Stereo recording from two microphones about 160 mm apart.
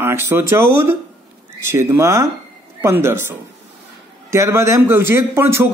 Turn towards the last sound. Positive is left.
turn(degrees=-15)  # may be behind; listen again after turning